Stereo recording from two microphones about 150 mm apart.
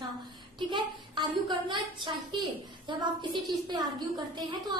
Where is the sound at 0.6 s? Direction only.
30° right (ahead or behind).